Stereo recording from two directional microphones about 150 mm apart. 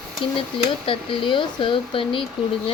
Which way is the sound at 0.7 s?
35° left (ahead or behind).